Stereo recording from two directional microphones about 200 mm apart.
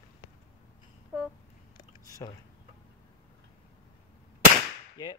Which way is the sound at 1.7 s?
20° left (ahead or behind).